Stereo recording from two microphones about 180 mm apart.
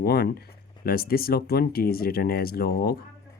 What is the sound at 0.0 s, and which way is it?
Speech, 60° left (ahead or behind).